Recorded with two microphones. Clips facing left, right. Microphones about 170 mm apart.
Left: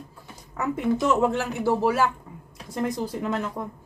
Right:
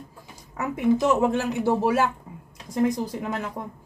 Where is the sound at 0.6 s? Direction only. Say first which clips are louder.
Right 2 dB; 15° right (ahead or behind).